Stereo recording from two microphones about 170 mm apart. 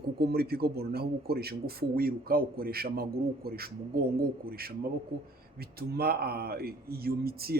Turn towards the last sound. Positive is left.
turn(degrees=-65)  # may be behind; listen again after turning